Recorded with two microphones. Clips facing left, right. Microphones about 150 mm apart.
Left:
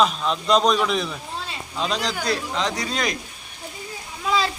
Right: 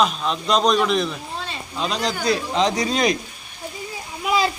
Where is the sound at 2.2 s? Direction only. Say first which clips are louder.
Right 5 dB; 15° right (ahead or behind).